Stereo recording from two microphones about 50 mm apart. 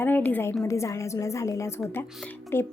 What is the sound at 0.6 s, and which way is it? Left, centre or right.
A woman's voice, left.